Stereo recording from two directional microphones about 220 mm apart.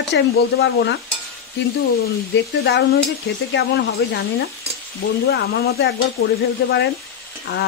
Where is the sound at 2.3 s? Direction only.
55° left (ahead or behind).